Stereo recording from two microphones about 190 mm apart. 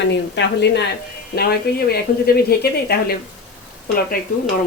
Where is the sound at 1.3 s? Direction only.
55° left (ahead or behind).